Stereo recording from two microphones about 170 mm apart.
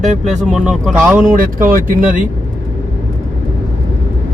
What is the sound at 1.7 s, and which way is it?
Speech, 60° right (ahead or behind).